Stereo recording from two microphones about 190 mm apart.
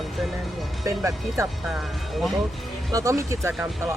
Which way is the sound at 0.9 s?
15° right (ahead or behind).